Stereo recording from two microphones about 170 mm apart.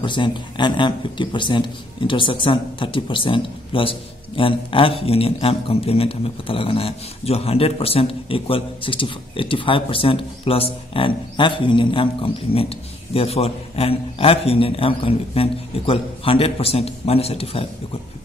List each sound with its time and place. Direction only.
0.0 s speech: 30° left (ahead or behind)